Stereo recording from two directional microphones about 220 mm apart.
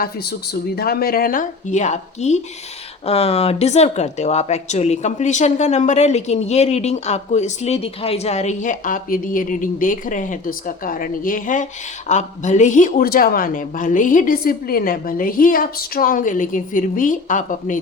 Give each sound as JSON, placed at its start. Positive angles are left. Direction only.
{"t": 0.0, "sound": "a woman's voice", "side_deg": 45}